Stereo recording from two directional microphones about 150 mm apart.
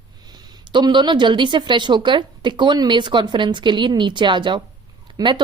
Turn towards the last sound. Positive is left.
turn(degrees=-30)  # may be behind; listen again after turning